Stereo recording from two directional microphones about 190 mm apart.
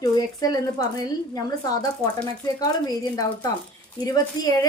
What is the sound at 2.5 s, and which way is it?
A woman's voice, 20° left (ahead or behind).